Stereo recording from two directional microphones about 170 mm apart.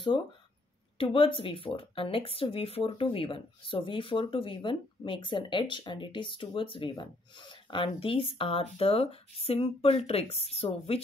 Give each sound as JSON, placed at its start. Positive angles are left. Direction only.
{"t": 0.9, "sound": "speech", "side_deg": 30}